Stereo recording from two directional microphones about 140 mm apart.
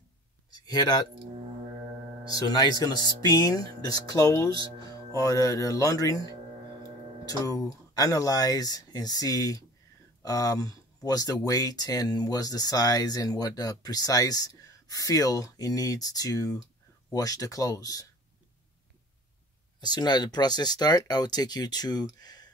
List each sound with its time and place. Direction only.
0.5 s speech: 30° left (ahead or behind)
2.3 s speech: 30° left (ahead or behind)
19.8 s speech: 30° left (ahead or behind)